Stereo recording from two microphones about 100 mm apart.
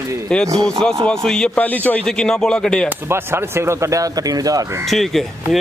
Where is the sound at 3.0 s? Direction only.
25° right (ahead or behind).